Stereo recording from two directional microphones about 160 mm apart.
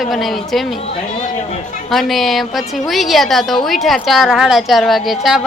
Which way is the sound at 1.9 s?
Centre (ahead or behind).